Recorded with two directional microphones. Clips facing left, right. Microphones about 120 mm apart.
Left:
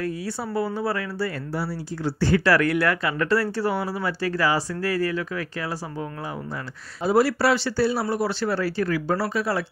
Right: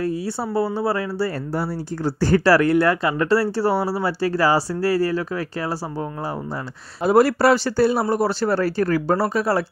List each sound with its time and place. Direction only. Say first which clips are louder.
0.0 s speech: right 4 dB; 30° right (ahead or behind)
1.5 s speech: right 4 dB; 45° right (ahead or behind)
7.0 s a man's voice: right 4 dB; 55° right (ahead or behind)